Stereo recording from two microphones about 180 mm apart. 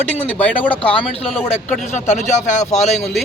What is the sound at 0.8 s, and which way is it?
Speech, 30° left (ahead or behind).